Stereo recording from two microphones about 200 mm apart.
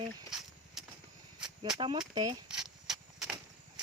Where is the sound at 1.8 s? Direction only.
20° right (ahead or behind).